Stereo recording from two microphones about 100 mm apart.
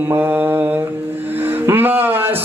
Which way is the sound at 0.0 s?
20° right (ahead or behind).